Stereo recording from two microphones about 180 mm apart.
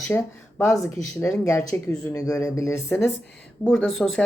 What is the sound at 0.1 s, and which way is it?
Speech, 5° left (ahead or behind).